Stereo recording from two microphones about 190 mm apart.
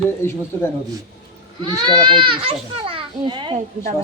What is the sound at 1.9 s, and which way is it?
A woman's voice, 25° right (ahead or behind).